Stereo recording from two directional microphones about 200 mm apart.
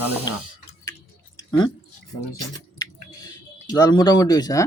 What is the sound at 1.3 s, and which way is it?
Chewing, 20° left (ahead or behind).